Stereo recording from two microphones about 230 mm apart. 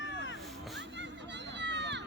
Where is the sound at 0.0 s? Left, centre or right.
Left.